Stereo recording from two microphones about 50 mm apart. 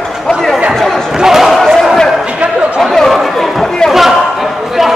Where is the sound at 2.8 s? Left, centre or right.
Centre.